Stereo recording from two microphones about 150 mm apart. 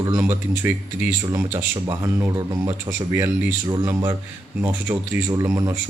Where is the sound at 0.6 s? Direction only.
15° right (ahead or behind).